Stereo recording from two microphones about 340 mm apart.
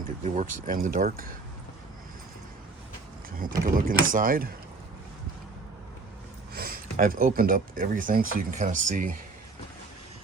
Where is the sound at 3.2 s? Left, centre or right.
Right.